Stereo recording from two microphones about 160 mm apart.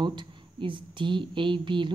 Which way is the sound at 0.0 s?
30° right (ahead or behind).